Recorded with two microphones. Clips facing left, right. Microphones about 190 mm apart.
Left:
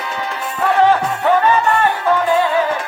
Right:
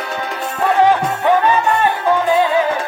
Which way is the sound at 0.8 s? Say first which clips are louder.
Even; 15° right (ahead or behind).